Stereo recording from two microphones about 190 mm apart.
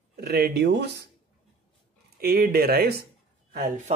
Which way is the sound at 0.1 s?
55° right (ahead or behind).